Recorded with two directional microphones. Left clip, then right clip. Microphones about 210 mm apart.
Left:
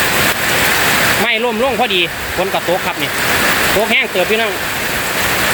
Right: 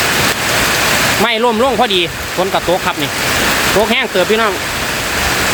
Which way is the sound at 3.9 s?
25° right (ahead or behind).